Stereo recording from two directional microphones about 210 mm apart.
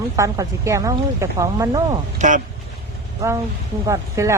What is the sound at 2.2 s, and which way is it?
Speech, 35° right (ahead or behind).